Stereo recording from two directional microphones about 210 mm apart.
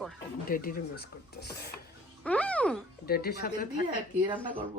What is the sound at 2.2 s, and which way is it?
Speech, 5° left (ahead or behind).